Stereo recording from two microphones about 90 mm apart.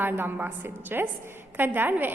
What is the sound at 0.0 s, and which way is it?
A woman's voice, 25° right (ahead or behind).